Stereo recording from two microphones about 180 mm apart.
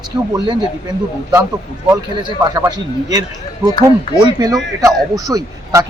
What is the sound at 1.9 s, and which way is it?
Speech, 20° right (ahead or behind).